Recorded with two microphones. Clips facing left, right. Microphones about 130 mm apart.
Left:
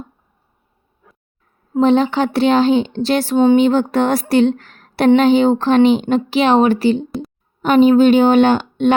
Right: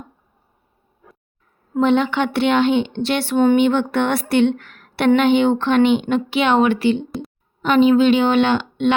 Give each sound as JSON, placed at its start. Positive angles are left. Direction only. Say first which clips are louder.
{"t": 1.8, "sound": "a woman's voice", "louder": "left 3 dB", "side_deg": 35}